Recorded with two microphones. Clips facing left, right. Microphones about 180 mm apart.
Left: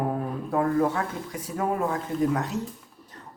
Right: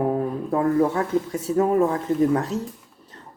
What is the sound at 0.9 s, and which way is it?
Speech, 25° right (ahead or behind).